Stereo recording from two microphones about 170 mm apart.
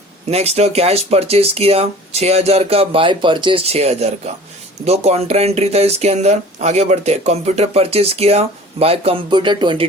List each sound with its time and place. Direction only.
0.3 s speech: 40° right (ahead or behind)